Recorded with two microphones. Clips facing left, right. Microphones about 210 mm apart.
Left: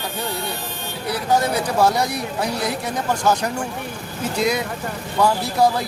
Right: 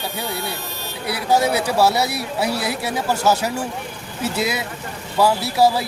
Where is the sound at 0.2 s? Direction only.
10° right (ahead or behind).